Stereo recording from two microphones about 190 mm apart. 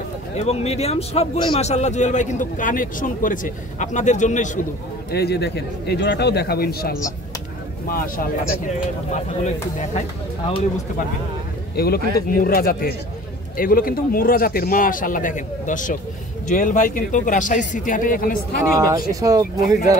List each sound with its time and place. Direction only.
0.4 s a man's voice: 35° left (ahead or behind)
5.1 s a man's voice: 60° left (ahead or behind)
11.7 s speech: 55° left (ahead or behind)
18.6 s speech: 15° right (ahead or behind)